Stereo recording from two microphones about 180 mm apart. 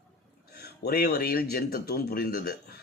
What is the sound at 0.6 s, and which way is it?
Speech, 60° left (ahead or behind).